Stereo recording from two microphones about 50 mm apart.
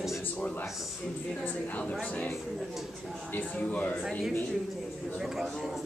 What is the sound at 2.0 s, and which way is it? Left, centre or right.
Speech, left.